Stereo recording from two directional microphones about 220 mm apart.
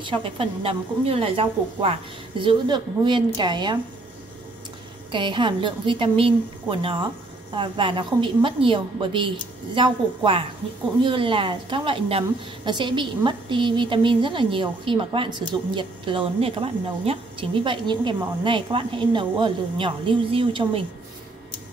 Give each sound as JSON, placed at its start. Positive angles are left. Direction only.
{"t": 0.0, "sound": "a woman's voice", "side_deg": -25}
{"t": 5.1, "sound": "a woman's voice", "side_deg": -20}